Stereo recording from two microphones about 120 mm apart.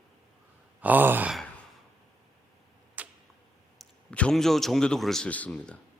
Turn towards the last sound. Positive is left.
turn(degrees=10)  # may be behind; listen again after turning